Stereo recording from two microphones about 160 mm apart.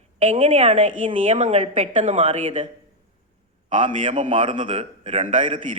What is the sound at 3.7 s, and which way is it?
A woman's voice, 50° right (ahead or behind).